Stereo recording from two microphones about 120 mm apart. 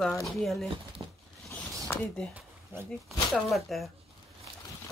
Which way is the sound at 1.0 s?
45° right (ahead or behind).